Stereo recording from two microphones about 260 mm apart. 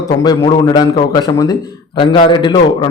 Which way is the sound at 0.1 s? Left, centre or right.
Centre.